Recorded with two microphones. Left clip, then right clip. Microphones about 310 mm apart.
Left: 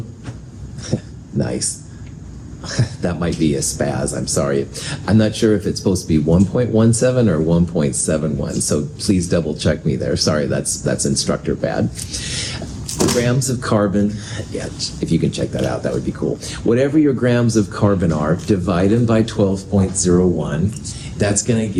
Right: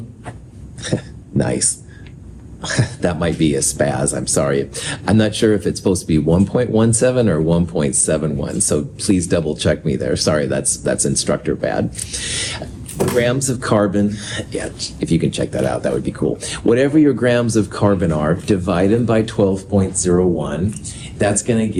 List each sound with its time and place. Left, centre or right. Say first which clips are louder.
1.4 s speech: right 3 dB; right